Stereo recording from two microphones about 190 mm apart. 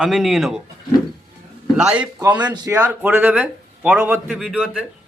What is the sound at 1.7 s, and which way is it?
Speech, 5° right (ahead or behind).